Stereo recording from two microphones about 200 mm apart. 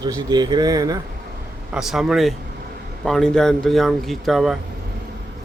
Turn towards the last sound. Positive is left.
turn(degrees=0)  # may be behind; listen again after turning